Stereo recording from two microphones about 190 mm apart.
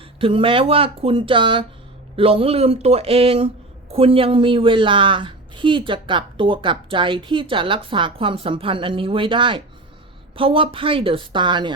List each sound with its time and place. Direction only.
0.2 s speech: 25° right (ahead or behind)